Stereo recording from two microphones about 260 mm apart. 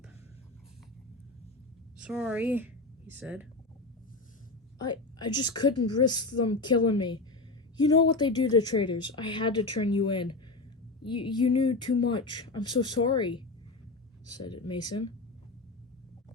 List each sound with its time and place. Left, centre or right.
2.0 s a woman's voice: centre
4.9 s speech: centre